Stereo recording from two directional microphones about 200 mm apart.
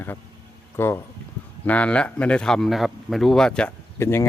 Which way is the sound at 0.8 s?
10° left (ahead or behind).